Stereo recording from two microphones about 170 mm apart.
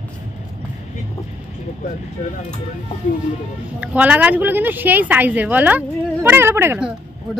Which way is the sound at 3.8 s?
10° right (ahead or behind).